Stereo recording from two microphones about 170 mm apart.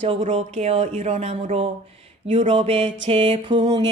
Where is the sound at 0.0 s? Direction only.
35° right (ahead or behind).